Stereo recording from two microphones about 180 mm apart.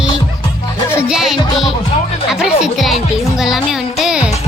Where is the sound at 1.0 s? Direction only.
5° right (ahead or behind).